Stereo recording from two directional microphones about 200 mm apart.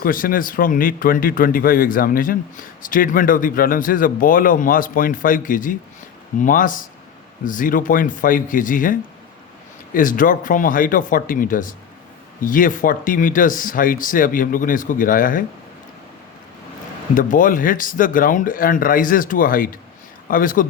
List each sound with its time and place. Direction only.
0.0 s a man's voice: 45° left (ahead or behind)
17.2 s a man's voice: 40° left (ahead or behind)